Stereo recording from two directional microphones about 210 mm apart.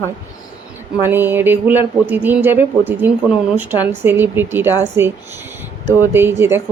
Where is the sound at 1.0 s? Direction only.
10° right (ahead or behind).